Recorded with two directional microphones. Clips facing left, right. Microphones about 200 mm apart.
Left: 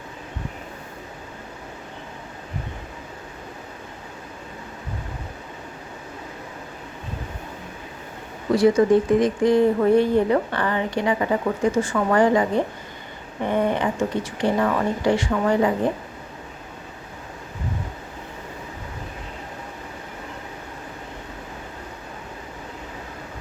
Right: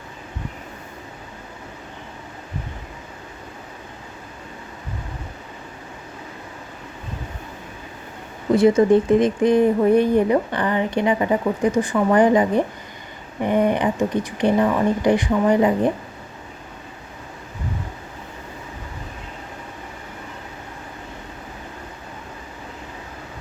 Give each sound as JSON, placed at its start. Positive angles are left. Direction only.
{"t": 8.5, "sound": "speech", "side_deg": -25}